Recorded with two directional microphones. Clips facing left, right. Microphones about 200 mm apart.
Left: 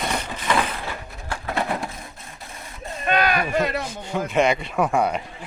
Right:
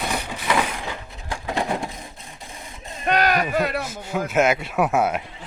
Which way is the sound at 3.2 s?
40° right (ahead or behind).